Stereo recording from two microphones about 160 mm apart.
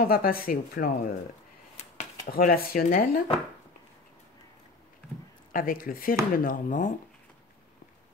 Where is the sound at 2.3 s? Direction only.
65° left (ahead or behind).